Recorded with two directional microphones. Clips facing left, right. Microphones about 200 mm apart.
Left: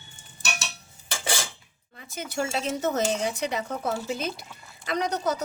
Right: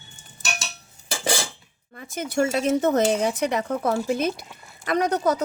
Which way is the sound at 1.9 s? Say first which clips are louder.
Right 6 dB; 55° right (ahead or behind).